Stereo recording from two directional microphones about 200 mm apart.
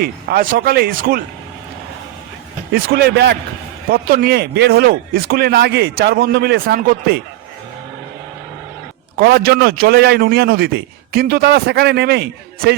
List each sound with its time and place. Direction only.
0.0 s a man's voice: 50° right (ahead or behind)
2.7 s a man's voice: 50° right (ahead or behind)
9.1 s a man's voice: 55° right (ahead or behind)